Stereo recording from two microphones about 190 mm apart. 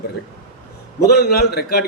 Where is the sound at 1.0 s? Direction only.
55° left (ahead or behind).